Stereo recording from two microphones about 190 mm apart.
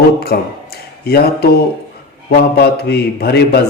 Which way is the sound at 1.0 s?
55° left (ahead or behind).